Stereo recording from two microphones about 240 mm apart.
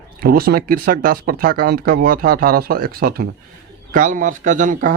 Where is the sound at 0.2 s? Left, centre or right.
Right.